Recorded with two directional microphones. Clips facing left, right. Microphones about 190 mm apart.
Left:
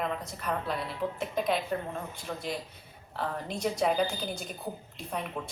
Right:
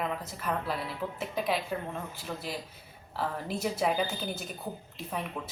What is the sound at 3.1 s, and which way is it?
Speech, 5° right (ahead or behind).